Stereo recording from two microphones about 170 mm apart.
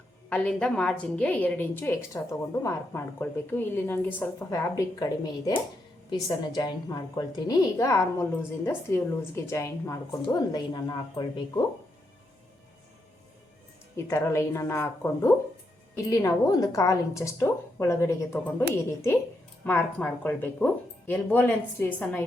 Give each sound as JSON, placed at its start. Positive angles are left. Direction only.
{"t": 0.3, "sound": "a woman's voice", "side_deg": 5}
{"t": 13.9, "sound": "a woman's voice", "side_deg": 15}